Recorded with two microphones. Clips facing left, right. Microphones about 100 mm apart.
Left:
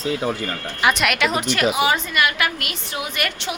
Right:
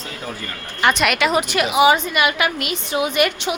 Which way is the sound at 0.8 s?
Centre (ahead or behind).